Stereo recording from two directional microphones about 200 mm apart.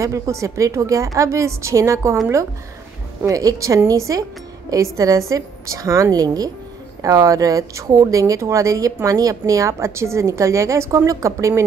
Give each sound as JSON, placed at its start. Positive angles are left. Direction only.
{"t": 0.0, "sound": "speech", "side_deg": -15}
{"t": 3.3, "sound": "speech", "side_deg": -15}